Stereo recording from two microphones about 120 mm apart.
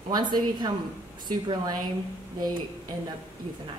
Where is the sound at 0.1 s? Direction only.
35° right (ahead or behind).